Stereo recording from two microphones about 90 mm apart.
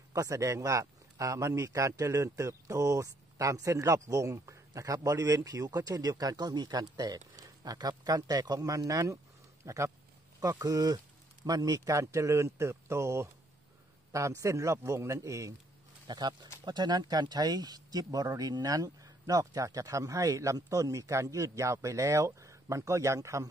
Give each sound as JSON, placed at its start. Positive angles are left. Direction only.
{"t": 0.1, "sound": "a man's voice", "side_deg": -35}
{"t": 16.1, "sound": "a man's voice", "side_deg": -55}